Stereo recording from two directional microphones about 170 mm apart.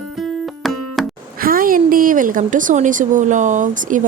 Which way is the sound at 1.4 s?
55° right (ahead or behind).